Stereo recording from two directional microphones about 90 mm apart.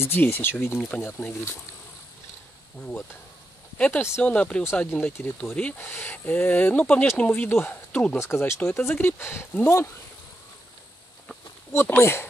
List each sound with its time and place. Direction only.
0.0 s speech: 25° left (ahead or behind)
3.7 s speech: 15° left (ahead or behind)
8.2 s speech: 30° left (ahead or behind)
8.5 s speech: 20° left (ahead or behind)
11.7 s speech: 25° left (ahead or behind)